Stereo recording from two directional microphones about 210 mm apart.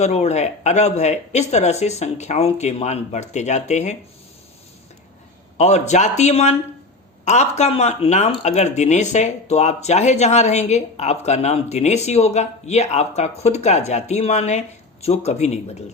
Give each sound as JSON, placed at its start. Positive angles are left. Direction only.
{"t": 0.0, "sound": "speech", "side_deg": 30}
{"t": 5.5, "sound": "speech", "side_deg": 30}